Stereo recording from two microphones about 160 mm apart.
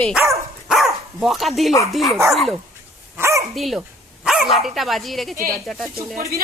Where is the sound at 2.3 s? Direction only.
Centre (ahead or behind).